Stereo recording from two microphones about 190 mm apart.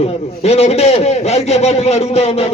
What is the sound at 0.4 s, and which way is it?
A man's voice, 35° left (ahead or behind).